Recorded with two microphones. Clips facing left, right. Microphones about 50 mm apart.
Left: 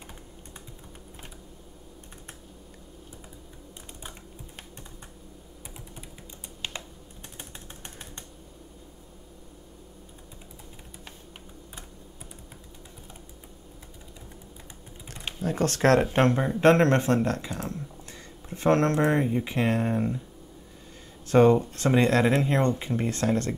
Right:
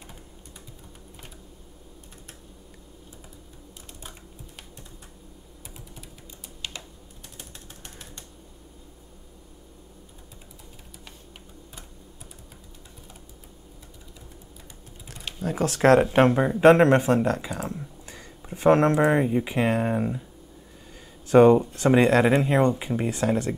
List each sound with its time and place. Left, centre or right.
15.3 s speech: centre
21.3 s speech: centre